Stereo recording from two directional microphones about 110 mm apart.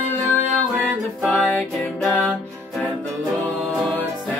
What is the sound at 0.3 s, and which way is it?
Music, 15° left (ahead or behind).